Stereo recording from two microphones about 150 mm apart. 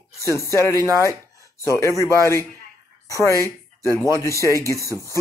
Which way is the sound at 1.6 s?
20° left (ahead or behind).